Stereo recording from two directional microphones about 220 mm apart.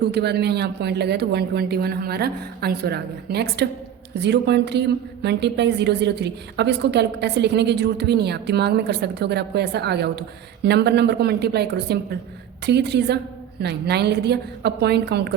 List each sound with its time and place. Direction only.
0.0 s a woman's voice: 50° right (ahead or behind)